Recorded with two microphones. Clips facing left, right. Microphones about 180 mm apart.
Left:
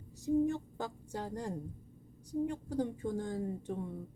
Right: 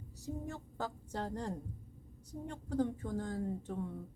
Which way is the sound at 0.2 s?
15° left (ahead or behind).